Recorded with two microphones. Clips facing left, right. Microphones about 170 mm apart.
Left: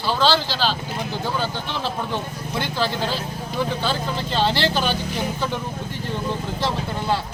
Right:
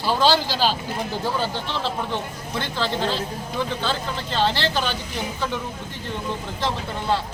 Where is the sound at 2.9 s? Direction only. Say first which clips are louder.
Right 1 dB; 20° right (ahead or behind).